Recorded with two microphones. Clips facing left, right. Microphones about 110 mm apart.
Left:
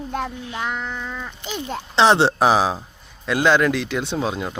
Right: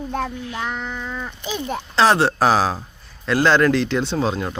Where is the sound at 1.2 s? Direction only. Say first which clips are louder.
Right 3 dB; 10° right (ahead or behind).